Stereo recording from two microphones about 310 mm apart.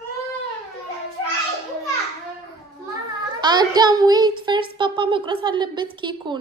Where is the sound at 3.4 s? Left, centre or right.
Centre.